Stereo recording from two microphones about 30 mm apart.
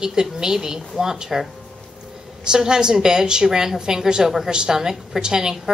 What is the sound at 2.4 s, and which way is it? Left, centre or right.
A woman's voice, right.